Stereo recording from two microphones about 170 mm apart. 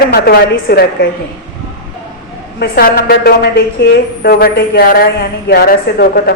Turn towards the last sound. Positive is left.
turn(degrees=65)  # may be behind; listen again after turning